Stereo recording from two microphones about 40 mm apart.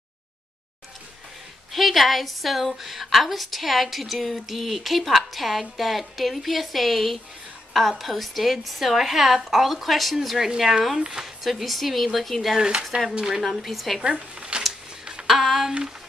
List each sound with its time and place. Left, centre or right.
1.7 s a woman's voice: centre
11.0 s a woman's voice: centre
11.4 s a woman's voice: centre
12.5 s a woman's voice: right
13.6 s a woman's voice: centre
14.5 s a sound: right
15.2 s a sound: centre